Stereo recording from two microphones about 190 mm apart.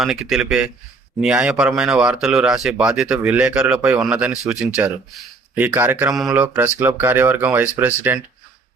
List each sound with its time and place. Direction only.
0.0 s speech: 5° right (ahead or behind)